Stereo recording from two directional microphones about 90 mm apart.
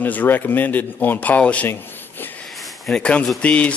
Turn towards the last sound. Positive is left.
turn(degrees=15)  # may be behind; listen again after turning